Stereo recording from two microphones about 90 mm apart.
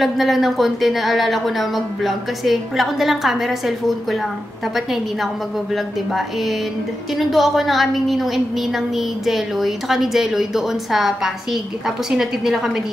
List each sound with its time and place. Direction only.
0.0 s a woman's voice: centre (ahead or behind)
7.2 s a woman's voice: centre (ahead or behind)